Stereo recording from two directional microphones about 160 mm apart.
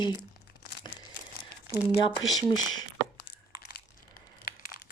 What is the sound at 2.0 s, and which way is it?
Speech, 25° left (ahead or behind).